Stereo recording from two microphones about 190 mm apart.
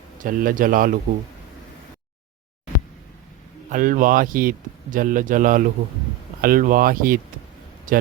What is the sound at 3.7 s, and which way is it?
Speech, 45° right (ahead or behind).